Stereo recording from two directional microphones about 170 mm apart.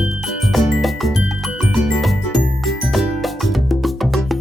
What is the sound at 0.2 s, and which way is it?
Music, centre (ahead or behind).